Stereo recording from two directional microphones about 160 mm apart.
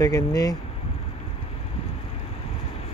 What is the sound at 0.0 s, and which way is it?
Speech, 20° left (ahead or behind).